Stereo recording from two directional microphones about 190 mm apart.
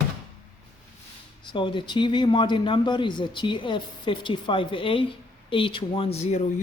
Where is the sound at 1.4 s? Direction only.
25° left (ahead or behind).